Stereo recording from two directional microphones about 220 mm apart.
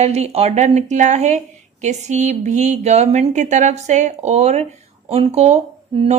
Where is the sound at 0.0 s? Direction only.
30° right (ahead or behind).